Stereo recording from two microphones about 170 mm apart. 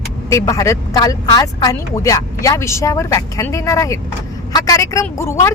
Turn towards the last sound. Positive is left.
turn(degrees=15)  # may be behind; listen again after turning